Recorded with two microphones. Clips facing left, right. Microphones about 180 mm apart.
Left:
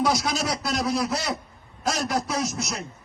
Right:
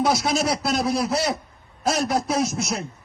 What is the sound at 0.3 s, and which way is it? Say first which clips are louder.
A man's voice: right 4 dB; 30° right (ahead or behind).